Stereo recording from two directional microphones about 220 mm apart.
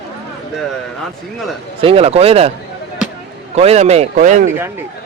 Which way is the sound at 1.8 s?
30° right (ahead or behind).